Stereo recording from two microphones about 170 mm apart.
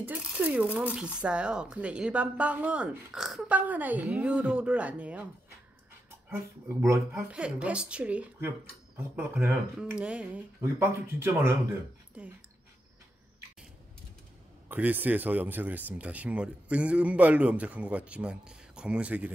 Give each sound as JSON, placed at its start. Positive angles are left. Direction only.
{"t": 0.0, "sound": "speech", "side_deg": -10}
{"t": 6.3, "sound": "speech", "side_deg": -15}
{"t": 7.2, "sound": "speech", "side_deg": -5}
{"t": 14.7, "sound": "speech", "side_deg": -10}